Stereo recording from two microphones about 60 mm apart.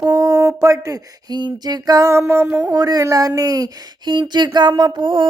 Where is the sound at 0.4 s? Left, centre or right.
Right.